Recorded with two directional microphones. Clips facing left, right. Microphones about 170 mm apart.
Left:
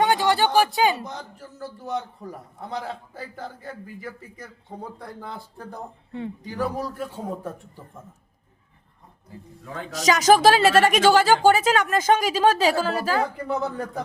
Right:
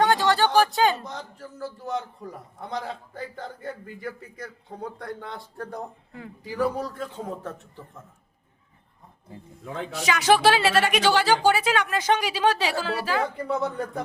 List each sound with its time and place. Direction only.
0.0 s a sound: 15° left (ahead or behind)
0.8 s a man's voice: 10° left (ahead or behind)
9.9 s a woman's voice: 40° left (ahead or behind)
13.5 s a man's voice: centre (ahead or behind)